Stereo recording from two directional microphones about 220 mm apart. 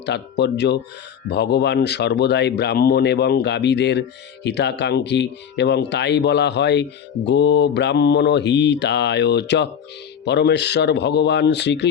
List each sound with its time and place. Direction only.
0.0 s speech: 50° left (ahead or behind)